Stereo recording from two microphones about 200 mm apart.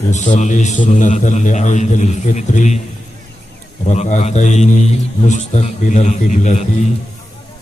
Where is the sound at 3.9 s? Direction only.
35° left (ahead or behind).